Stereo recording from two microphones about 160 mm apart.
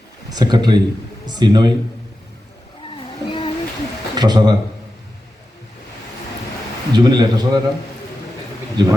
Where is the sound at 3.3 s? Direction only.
30° left (ahead or behind).